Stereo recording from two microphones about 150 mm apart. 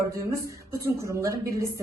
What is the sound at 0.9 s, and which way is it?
Speech, 20° right (ahead or behind).